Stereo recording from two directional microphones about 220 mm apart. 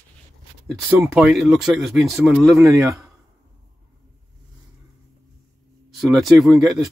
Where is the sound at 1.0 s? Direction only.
Centre (ahead or behind).